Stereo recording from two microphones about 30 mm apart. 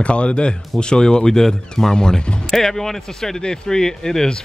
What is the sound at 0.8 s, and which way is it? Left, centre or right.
Speech, left.